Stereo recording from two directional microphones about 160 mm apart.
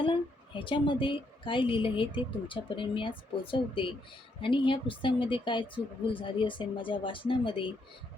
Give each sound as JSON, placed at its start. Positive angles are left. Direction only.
{"t": 0.0, "sound": "speech", "side_deg": 30}